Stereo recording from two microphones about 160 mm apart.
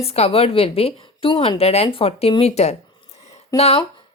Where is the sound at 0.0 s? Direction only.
40° left (ahead or behind).